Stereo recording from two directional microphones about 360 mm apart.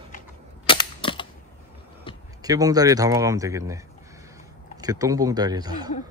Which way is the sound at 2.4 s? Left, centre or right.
Centre.